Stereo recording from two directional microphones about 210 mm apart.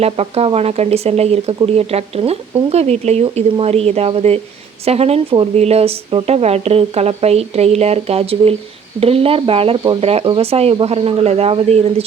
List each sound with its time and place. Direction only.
0.0 s speech: 30° right (ahead or behind)